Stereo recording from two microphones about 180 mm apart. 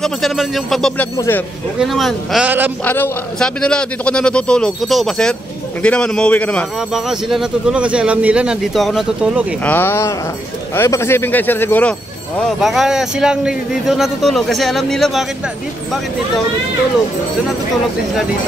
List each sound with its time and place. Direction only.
0.0 s a man's voice: centre (ahead or behind)
1.1 s speech: 15° left (ahead or behind)
1.8 s a man's voice: centre (ahead or behind)
2.8 s a man's voice: 10° left (ahead or behind); by 9.5 s 5° right (ahead or behind)
9.7 s a man's voice: 10° left (ahead or behind)